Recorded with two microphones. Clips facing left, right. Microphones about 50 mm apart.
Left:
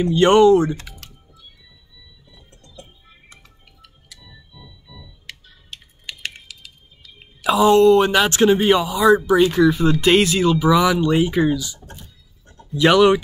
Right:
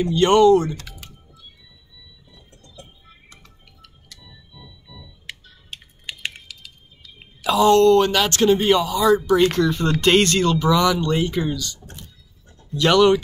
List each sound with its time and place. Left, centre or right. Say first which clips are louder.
0.0 s speech: left 2 dB; left
2.8 s music: left 2 dB; centre
6.0 s typing: right 1 dB; centre
6.4 s typing: even; centre
7.4 s speech: left 1 dB; centre